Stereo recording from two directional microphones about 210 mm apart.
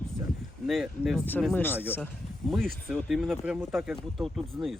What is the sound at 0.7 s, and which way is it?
Speech, centre (ahead or behind).